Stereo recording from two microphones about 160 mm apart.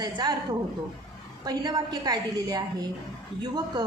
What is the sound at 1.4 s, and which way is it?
A woman's voice, 25° right (ahead or behind).